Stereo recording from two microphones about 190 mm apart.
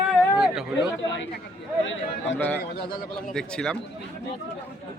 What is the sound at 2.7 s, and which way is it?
Speech, 45° left (ahead or behind).